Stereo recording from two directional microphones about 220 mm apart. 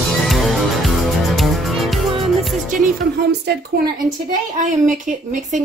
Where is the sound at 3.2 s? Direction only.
50° right (ahead or behind).